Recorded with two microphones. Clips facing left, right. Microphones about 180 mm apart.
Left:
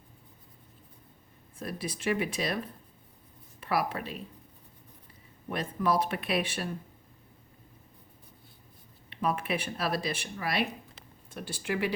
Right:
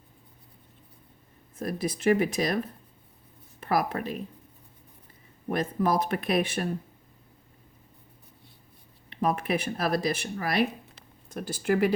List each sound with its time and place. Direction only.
1.5 s speech: 40° right (ahead or behind)
3.6 s speech: 45° right (ahead or behind)
5.5 s speech: 40° right (ahead or behind)
9.0 s speech: 40° right (ahead or behind)